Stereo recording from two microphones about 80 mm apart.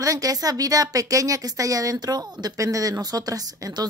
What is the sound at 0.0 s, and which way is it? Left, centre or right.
A woman's voice, right.